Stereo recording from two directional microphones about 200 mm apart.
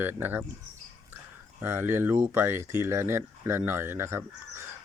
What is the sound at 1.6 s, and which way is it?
Speech, 10° right (ahead or behind).